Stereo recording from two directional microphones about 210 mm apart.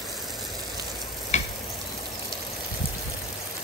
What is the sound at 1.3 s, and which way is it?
Sizzle, 35° left (ahead or behind).